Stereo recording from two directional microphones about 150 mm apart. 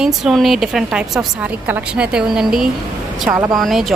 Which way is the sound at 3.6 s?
Centre (ahead or behind).